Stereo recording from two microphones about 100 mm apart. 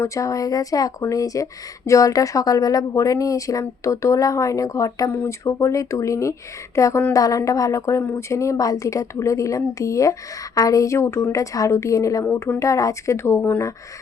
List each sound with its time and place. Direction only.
0.0 s a woman's voice: 30° left (ahead or behind)